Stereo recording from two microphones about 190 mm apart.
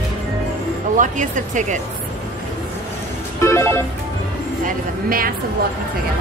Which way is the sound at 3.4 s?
15° left (ahead or behind).